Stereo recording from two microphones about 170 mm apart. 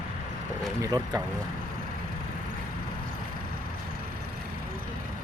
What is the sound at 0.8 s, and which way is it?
Speech, 25° right (ahead or behind).